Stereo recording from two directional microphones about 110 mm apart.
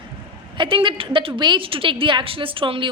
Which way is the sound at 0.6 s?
50° right (ahead or behind).